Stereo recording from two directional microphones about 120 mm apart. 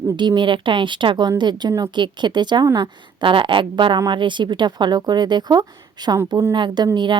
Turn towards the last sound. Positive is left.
turn(degrees=-40)  # may be behind; listen again after turning